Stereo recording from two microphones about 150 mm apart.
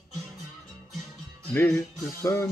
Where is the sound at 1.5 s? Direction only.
15° left (ahead or behind).